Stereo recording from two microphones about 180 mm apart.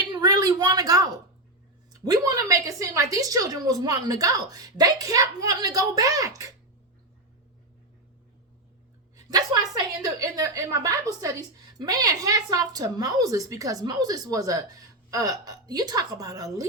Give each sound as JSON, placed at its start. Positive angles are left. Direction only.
{"t": 0.0, "sound": "a sound", "side_deg": -20}
{"t": 2.0, "sound": "a woman's voice", "side_deg": -20}
{"t": 10.0, "sound": "a woman's voice", "side_deg": -20}